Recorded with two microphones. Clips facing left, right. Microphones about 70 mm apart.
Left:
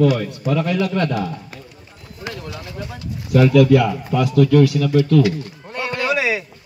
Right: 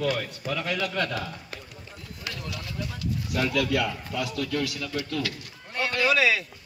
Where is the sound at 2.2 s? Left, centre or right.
Left.